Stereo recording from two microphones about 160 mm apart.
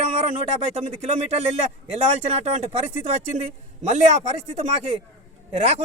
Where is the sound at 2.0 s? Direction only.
40° right (ahead or behind).